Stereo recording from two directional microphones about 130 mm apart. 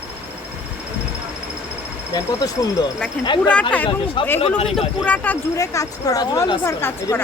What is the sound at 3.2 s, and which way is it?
Speech, 35° left (ahead or behind).